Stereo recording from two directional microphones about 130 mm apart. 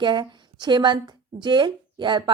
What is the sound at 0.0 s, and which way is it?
A woman's voice, 35° right (ahead or behind).